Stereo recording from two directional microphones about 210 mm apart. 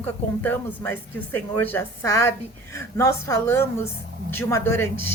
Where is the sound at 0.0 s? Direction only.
10° left (ahead or behind).